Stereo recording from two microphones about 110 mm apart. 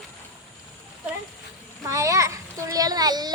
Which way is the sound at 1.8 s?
30° right (ahead or behind).